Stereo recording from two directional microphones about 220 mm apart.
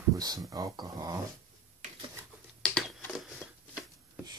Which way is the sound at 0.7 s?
15° right (ahead or behind).